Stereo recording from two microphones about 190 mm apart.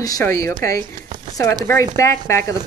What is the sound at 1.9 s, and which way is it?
Speech, 15° left (ahead or behind).